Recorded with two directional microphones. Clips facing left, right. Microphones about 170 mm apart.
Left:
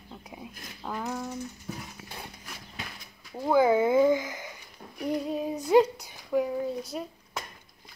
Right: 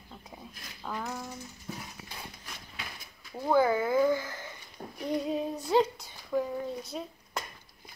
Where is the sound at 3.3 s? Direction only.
10° left (ahead or behind).